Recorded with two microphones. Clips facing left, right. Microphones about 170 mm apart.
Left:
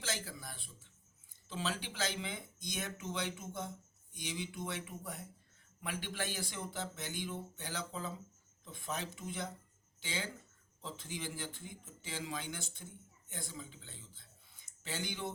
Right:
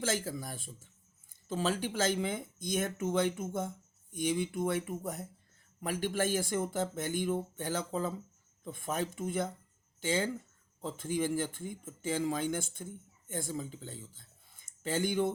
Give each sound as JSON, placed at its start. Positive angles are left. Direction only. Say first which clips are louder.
{"t": 0.0, "sound": "speech", "louder": "right 9 dB", "side_deg": -50}